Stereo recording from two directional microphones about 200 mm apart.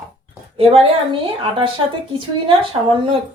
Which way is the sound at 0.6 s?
30° right (ahead or behind).